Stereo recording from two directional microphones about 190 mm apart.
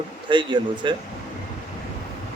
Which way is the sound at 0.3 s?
25° right (ahead or behind).